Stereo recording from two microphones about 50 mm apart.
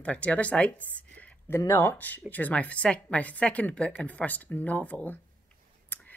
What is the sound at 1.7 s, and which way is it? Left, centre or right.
Speech, left.